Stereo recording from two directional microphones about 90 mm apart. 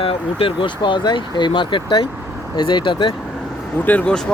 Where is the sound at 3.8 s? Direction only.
15° left (ahead or behind).